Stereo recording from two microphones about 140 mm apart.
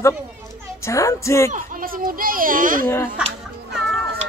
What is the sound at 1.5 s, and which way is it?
Speech, 80° right.